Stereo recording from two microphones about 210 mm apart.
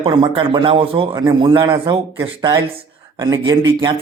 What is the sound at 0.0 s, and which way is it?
Speech, 25° right (ahead or behind).